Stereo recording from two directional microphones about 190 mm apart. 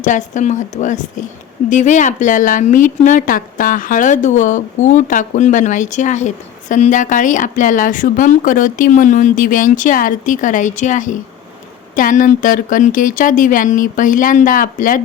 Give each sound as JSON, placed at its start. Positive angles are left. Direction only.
{"t": 0.0, "sound": "a woman's voice", "side_deg": 40}